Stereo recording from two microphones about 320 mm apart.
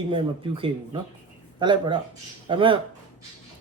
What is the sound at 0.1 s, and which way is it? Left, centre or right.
Speech, centre.